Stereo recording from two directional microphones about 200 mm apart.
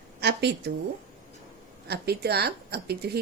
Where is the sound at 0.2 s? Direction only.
55° right (ahead or behind).